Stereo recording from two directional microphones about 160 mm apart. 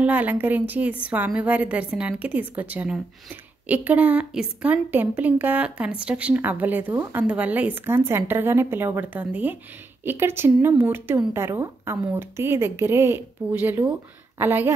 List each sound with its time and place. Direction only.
0.0 s a woman's voice: 10° right (ahead or behind)